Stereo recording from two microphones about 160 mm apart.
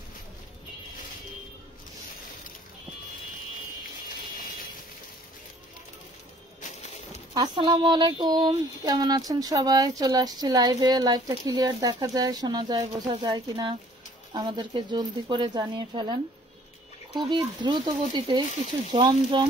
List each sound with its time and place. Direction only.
7.3 s speech: 30° right (ahead or behind)
17.2 s speech: 30° right (ahead or behind)